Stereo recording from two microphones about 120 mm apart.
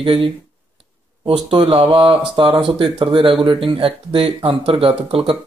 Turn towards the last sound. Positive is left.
turn(degrees=-50)  # may be behind; listen again after turning